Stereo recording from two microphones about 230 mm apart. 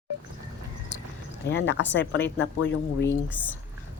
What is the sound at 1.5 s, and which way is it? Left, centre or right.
Speech, left.